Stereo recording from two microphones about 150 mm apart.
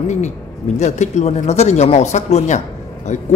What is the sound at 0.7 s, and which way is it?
A man's voice, 50° left (ahead or behind).